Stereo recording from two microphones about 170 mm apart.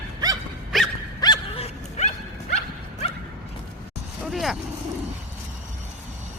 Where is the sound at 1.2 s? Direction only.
25° left (ahead or behind).